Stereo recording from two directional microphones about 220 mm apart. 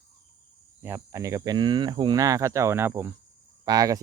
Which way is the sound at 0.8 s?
10° right (ahead or behind).